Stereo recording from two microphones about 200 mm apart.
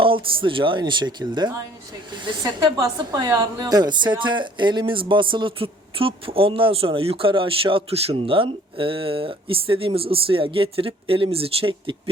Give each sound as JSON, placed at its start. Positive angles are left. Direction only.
{"t": 0.0, "sound": "a woman's voice", "side_deg": -25}